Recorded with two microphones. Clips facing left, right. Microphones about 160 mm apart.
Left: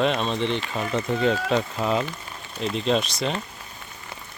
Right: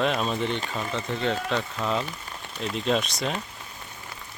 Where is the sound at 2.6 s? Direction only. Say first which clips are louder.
Left 2 dB; centre (ahead or behind).